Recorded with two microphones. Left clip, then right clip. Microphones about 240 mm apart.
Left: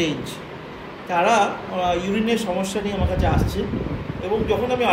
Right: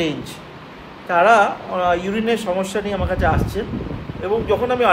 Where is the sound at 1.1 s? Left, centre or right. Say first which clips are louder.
Right 5 dB; centre.